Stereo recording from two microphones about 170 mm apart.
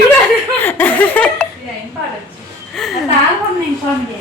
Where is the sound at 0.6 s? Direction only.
10° left (ahead or behind).